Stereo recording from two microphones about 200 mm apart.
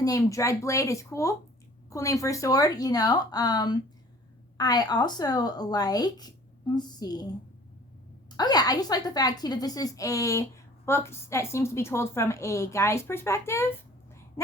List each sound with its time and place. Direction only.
0.0 s a woman's voice: 15° left (ahead or behind)
8.4 s a woman's voice: 20° left (ahead or behind)